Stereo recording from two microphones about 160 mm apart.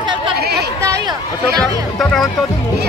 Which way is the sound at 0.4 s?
80° right.